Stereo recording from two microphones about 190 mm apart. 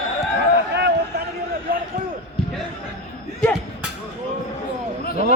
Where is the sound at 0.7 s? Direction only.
65° right (ahead or behind).